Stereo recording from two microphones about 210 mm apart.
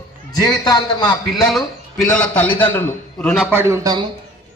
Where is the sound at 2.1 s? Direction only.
5° left (ahead or behind).